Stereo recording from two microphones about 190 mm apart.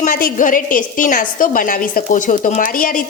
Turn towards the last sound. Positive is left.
turn(degrees=45)  # may be behind; listen again after turning